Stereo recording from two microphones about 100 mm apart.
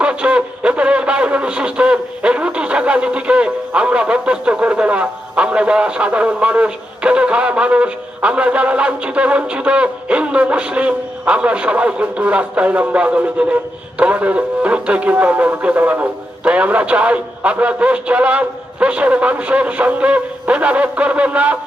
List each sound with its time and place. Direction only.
0.0 s music: 10° right (ahead or behind)